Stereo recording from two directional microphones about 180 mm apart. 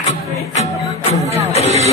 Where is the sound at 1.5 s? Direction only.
35° left (ahead or behind).